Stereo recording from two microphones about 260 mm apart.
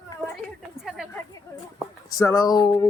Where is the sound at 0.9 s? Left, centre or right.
Centre.